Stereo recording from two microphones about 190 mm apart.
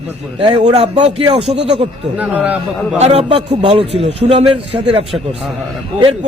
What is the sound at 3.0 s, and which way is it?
A man's voice, 30° right (ahead or behind).